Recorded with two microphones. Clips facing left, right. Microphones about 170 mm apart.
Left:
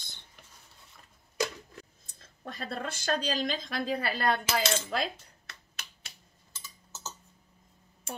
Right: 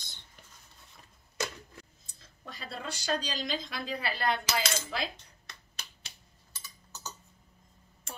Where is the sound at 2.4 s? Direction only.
50° left (ahead or behind).